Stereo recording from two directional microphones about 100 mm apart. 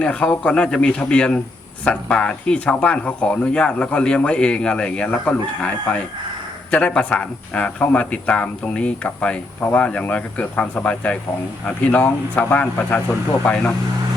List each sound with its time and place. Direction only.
0.0 s speech: 10° left (ahead or behind)